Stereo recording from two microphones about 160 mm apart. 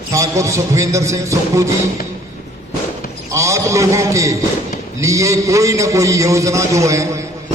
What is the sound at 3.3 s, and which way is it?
A man's voice, 20° right (ahead or behind).